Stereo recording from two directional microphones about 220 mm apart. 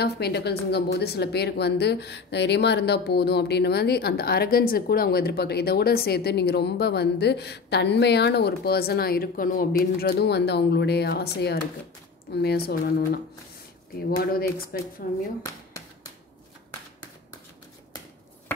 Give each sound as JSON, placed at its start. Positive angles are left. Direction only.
{"t": 0.0, "sound": "a woman's voice", "side_deg": 45}